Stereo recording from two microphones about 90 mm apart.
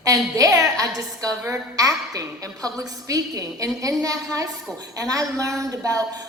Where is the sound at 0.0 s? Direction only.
40° right (ahead or behind).